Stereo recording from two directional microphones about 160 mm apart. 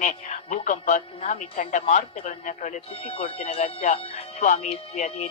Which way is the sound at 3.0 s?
40° left (ahead or behind).